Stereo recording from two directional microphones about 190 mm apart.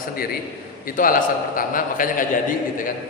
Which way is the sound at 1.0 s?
45° left (ahead or behind).